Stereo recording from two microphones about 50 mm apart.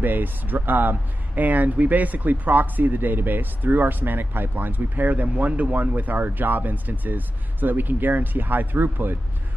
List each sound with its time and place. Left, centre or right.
0.0 s speech: right